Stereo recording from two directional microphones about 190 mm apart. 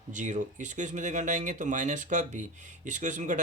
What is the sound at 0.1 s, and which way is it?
Speech, 40° right (ahead or behind).